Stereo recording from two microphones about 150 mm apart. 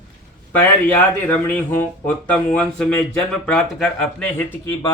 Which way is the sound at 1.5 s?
10° left (ahead or behind).